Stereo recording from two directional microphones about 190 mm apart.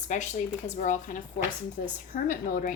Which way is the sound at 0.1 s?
40° left (ahead or behind).